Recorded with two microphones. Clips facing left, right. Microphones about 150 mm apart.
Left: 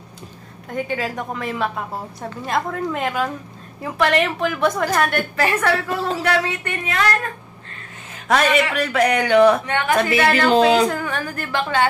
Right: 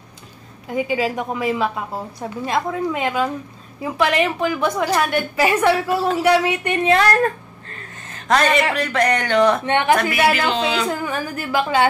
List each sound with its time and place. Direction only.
0.7 s a woman's voice: 5° right (ahead or behind)
6.8 s a woman's voice: 35° right (ahead or behind)
8.1 s a sound: 5° left (ahead or behind)
8.7 s speech: 5° left (ahead or behind)
9.7 s a woman's voice: 20° right (ahead or behind)
10.5 s speech: 45° left (ahead or behind)
10.9 s a woman's voice: 5° right (ahead or behind)